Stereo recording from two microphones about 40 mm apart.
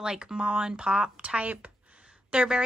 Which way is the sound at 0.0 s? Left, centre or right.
Right.